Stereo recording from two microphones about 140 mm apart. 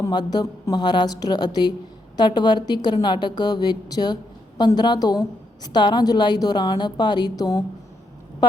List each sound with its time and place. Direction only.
0.0 s a woman's voice: 30° left (ahead or behind)